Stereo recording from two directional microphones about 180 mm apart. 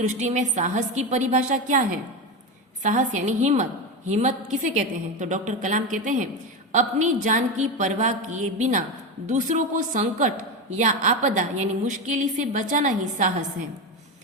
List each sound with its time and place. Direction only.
0.1 s a woman's voice: 40° right (ahead or behind)
2.8 s a woman's voice: 45° right (ahead or behind)